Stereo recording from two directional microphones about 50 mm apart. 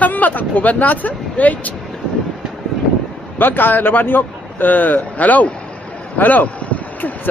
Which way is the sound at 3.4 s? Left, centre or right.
Left.